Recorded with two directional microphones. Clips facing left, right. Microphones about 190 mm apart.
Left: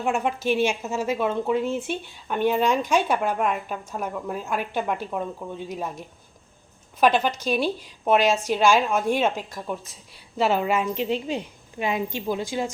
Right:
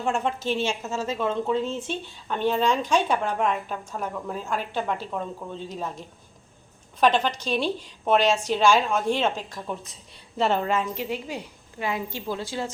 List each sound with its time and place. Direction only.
0.0 s a woman's voice: 10° left (ahead or behind)
10.9 s a woman's voice: 20° left (ahead or behind)